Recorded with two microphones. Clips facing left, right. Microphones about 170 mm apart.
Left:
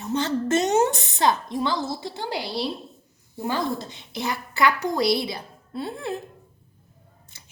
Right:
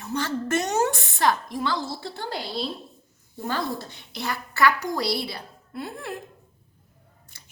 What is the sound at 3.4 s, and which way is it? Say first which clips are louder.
A woman's voice: left 2 dB; 15° left (ahead or behind).